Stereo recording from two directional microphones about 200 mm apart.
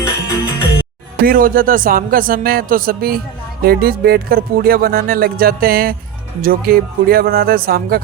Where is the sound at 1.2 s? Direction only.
45° right (ahead or behind).